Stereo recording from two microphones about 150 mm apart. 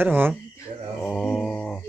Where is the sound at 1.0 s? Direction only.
Centre (ahead or behind).